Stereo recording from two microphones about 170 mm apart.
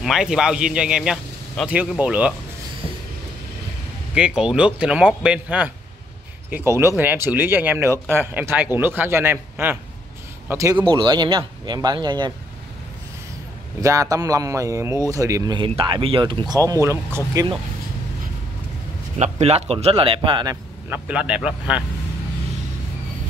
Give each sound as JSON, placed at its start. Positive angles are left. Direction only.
{"t": 0.0, "sound": "speech", "side_deg": 0}
{"t": 4.1, "sound": "speech", "side_deg": -5}
{"t": 13.7, "sound": "speech", "side_deg": -20}
{"t": 19.1, "sound": "speech", "side_deg": -40}
{"t": 20.9, "sound": "speech", "side_deg": -5}